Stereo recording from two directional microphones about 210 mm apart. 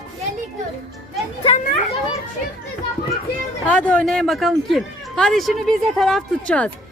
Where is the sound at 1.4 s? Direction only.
30° left (ahead or behind).